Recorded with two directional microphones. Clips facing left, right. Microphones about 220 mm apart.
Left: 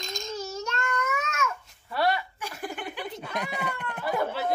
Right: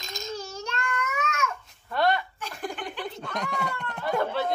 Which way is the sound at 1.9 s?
5° left (ahead or behind).